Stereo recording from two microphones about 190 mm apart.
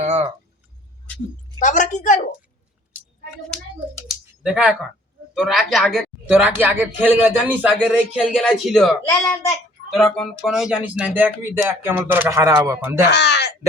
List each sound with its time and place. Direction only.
0.0 s a sound: 35° right (ahead or behind)
1.6 s a woman's voice: 40° left (ahead or behind)
4.1 s speech: 5° right (ahead or behind)
13.1 s speech: 65° left (ahead or behind)